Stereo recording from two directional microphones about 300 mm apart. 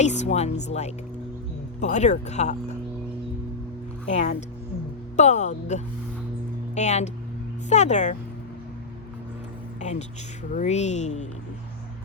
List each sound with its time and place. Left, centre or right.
0.0 s speech: left
4.1 s speech: left
9.8 s speech: left